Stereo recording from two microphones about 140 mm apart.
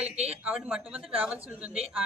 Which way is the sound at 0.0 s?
45° right (ahead or behind).